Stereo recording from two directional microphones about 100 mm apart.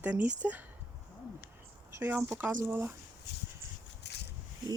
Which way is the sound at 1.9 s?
25° right (ahead or behind).